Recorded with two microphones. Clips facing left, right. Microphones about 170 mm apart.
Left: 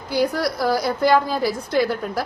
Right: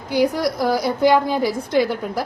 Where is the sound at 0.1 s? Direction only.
15° right (ahead or behind).